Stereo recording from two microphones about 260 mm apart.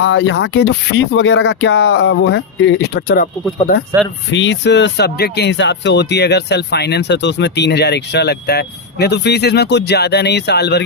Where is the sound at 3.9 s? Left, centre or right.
Centre.